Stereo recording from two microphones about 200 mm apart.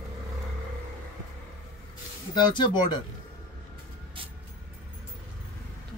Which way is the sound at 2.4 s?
20° left (ahead or behind).